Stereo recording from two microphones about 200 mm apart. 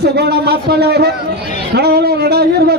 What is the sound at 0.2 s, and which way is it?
A man's voice, 55° right (ahead or behind).